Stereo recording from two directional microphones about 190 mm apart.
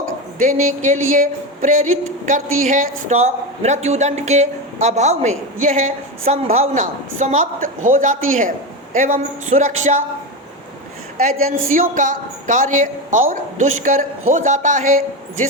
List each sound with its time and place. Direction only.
0.6 s a woman's voice: 40° right (ahead or behind)
11.2 s a woman's voice: 50° right (ahead or behind)